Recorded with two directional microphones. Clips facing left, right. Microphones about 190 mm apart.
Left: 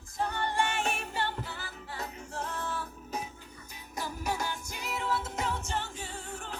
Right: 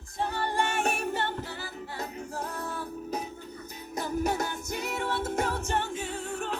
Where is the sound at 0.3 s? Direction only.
35° right (ahead or behind).